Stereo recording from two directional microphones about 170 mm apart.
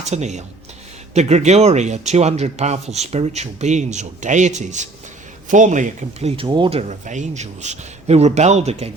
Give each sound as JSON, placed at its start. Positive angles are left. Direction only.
{"t": 0.0, "sound": "speech", "side_deg": -40}